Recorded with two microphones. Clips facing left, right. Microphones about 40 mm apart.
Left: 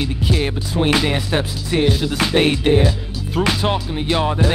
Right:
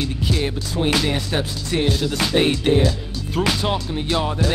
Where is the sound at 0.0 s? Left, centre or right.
Centre.